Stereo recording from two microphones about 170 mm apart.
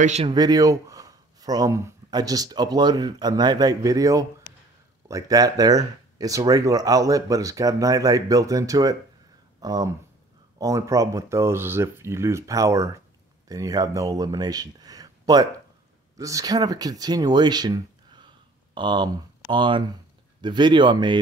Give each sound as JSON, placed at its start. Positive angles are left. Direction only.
{"t": 0.0, "sound": "speech", "side_deg": -40}
{"t": 0.3, "sound": "speech", "side_deg": -25}